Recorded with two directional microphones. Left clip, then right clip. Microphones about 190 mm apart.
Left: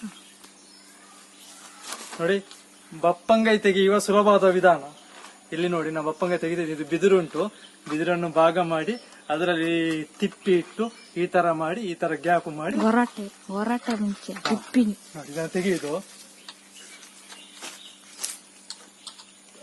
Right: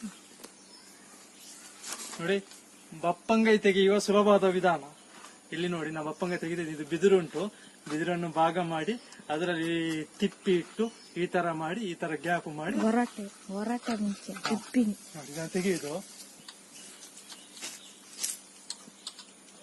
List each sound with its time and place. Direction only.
2.2 s a man's voice: 10° left (ahead or behind)
13.5 s a man's voice: 15° left (ahead or behind)
14.3 s speech: 35° right (ahead or behind)
15.5 s a man's voice: 15° left (ahead or behind)
17.6 s a sound: 55° right (ahead or behind)